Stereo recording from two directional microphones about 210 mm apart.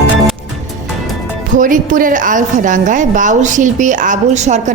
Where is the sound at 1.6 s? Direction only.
40° right (ahead or behind).